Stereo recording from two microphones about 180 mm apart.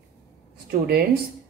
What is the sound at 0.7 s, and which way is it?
Speech, 60° right (ahead or behind).